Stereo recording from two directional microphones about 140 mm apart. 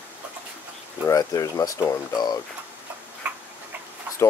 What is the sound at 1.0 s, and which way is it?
Speech, 25° left (ahead or behind).